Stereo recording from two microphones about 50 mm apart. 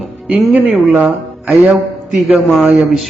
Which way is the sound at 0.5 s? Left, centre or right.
Right.